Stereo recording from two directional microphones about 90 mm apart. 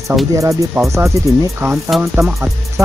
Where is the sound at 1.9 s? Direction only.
Centre (ahead or behind).